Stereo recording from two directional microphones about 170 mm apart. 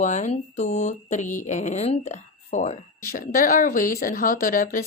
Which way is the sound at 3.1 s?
55° left (ahead or behind).